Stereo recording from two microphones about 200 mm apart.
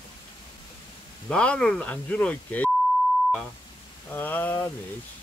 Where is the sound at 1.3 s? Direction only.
5° left (ahead or behind).